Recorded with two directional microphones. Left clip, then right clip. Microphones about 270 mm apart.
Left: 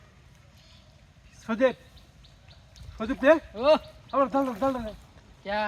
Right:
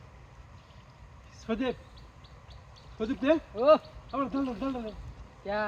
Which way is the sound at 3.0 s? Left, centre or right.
Centre.